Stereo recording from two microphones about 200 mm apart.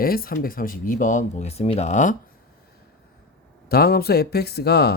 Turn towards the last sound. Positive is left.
turn(degrees=55)  # may be behind; listen again after turning